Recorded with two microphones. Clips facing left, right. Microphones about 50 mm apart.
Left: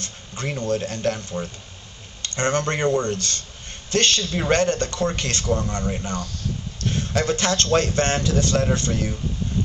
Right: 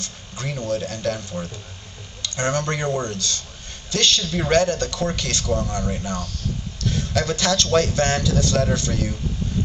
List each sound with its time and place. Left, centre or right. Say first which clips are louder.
0.0 s a man's voice: left 1 dB; left